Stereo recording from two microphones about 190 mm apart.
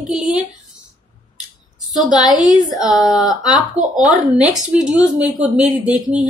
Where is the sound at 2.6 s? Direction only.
Centre (ahead or behind).